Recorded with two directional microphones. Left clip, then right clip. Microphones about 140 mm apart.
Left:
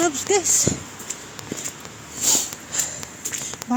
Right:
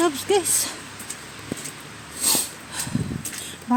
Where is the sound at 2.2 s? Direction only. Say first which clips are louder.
Left 2 dB; 20° right (ahead or behind).